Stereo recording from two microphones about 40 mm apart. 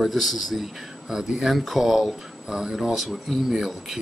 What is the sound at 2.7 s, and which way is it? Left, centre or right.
Speech, centre.